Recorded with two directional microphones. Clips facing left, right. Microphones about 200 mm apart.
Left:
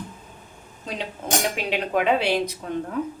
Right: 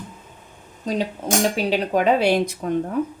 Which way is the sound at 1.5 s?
35° right (ahead or behind).